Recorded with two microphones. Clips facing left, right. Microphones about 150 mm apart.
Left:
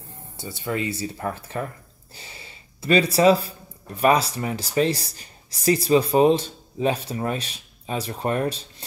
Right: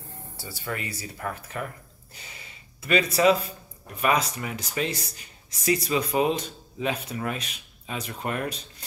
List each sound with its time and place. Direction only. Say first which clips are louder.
0.4 s a man's voice: left 7 dB; 20° left (ahead or behind)